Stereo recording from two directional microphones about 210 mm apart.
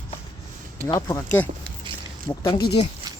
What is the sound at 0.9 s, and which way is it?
Speech, 15° left (ahead or behind).